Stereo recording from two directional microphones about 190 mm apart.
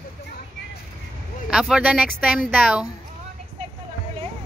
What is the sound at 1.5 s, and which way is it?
Speech, 5° right (ahead or behind).